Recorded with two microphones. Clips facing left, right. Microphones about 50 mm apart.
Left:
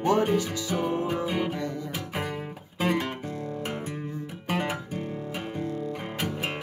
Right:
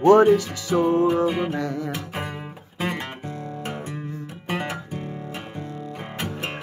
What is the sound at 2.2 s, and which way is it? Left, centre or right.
Music, centre.